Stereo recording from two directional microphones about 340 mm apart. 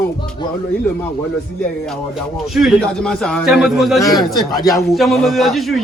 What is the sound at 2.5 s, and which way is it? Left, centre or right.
A man's voice, centre.